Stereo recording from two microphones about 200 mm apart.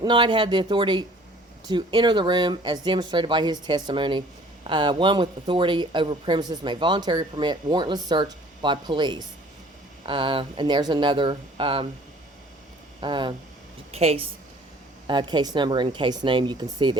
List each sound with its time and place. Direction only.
0.0 s speech: 25° right (ahead or behind)
13.0 s a woman's voice: 25° right (ahead or behind)